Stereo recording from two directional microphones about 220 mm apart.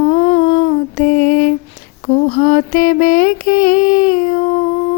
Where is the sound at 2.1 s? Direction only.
35° left (ahead or behind).